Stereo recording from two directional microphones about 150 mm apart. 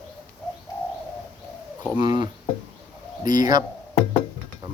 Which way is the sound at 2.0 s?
30° right (ahead or behind).